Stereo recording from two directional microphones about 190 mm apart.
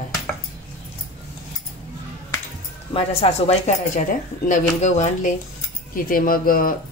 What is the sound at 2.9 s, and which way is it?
Speech, 30° left (ahead or behind).